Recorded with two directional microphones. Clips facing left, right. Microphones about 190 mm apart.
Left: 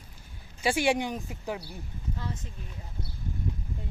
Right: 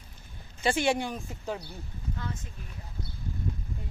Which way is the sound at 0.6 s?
10° left (ahead or behind).